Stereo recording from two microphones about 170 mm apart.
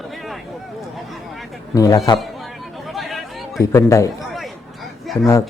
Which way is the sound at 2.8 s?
Centre (ahead or behind).